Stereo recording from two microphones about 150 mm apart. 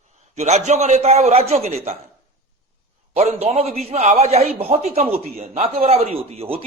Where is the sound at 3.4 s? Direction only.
45° right (ahead or behind).